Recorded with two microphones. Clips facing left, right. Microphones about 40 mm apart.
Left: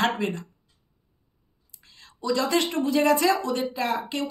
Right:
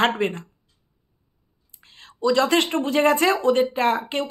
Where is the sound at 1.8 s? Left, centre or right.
Right.